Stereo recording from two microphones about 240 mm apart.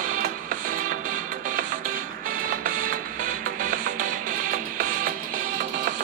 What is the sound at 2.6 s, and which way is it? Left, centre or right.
Music, right.